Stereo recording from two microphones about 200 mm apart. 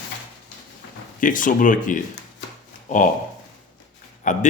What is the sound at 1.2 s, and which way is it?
Speech, 40° left (ahead or behind).